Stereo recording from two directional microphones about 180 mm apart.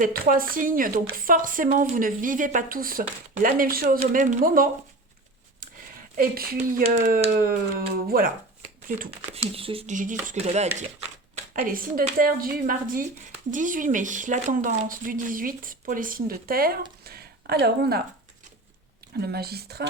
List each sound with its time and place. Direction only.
0.0 s speech: 50° right (ahead or behind)
6.1 s speech: 55° right (ahead or behind)
6.8 s speech: 40° right (ahead or behind)
9.0 s speech: 30° right (ahead or behind)
9.9 s speech: 45° right (ahead or behind)
11.5 s speech: 50° right (ahead or behind)
19.2 s speech: 60° right (ahead or behind)